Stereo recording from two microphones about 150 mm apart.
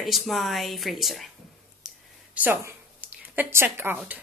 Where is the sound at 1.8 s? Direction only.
5° right (ahead or behind).